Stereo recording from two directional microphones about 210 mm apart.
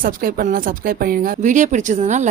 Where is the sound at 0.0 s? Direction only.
40° right (ahead or behind).